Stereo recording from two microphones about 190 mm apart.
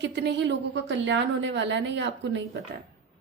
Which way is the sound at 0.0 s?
65° right (ahead or behind).